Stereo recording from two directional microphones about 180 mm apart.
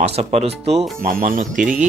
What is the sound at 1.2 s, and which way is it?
Speech, 50° right (ahead or behind).